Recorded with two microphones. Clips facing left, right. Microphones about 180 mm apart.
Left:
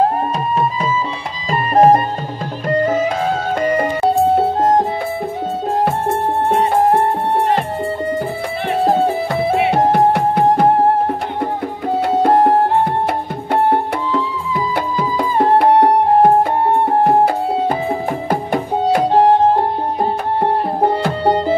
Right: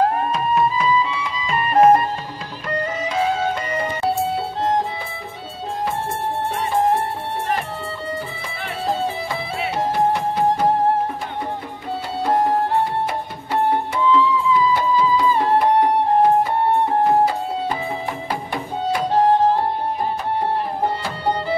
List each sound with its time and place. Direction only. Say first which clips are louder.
1.5 s music: left 3 dB; 35° left (ahead or behind)
2.8 s music: left 4 dB; 45° left (ahead or behind)
5.9 s music: left 6 dB; 55° left (ahead or behind)
8.6 s music: left 8 dB; 60° left (ahead or behind)
11.9 s music: left 7 dB; 55° left (ahead or behind)
19.1 s music: left 3 dB; 35° left (ahead or behind)
21.0 s music: left 7 dB; 45° left (ahead or behind)